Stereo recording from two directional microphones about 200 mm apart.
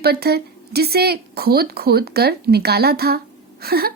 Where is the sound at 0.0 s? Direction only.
50° right (ahead or behind).